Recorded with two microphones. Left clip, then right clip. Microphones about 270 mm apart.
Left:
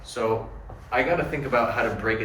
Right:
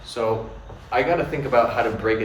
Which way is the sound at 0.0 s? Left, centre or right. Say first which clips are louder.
Right 2 dB; centre.